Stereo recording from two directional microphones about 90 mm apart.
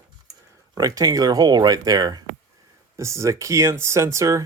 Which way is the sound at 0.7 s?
40° right (ahead or behind).